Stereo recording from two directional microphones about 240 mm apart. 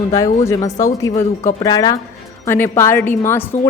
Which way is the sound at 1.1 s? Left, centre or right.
Left.